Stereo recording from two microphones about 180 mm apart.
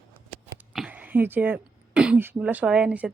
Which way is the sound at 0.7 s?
5° right (ahead or behind).